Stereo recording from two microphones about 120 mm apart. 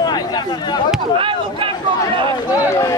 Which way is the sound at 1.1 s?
45° right (ahead or behind).